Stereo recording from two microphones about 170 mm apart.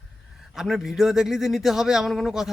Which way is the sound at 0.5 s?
Centre (ahead or behind).